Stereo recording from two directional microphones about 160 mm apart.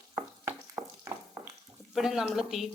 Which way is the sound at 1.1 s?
20° right (ahead or behind).